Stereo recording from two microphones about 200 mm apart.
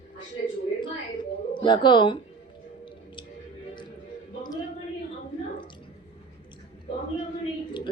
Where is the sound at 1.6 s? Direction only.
25° left (ahead or behind).